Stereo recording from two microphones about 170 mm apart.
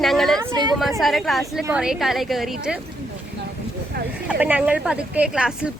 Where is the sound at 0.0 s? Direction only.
Centre (ahead or behind).